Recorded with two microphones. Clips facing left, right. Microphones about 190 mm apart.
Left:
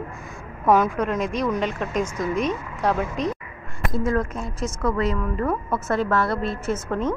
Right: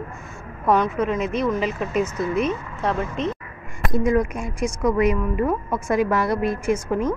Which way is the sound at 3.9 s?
15° right (ahead or behind).